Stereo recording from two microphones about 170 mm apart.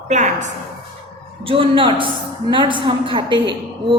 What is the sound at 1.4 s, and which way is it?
A woman's voice, 30° right (ahead or behind).